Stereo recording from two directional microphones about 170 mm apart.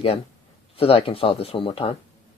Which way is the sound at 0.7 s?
35° left (ahead or behind).